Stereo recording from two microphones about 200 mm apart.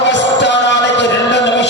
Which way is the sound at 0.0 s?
60° left (ahead or behind).